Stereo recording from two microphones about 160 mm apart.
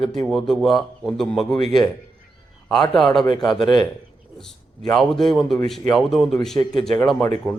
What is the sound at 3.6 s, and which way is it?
Speech, 30° left (ahead or behind).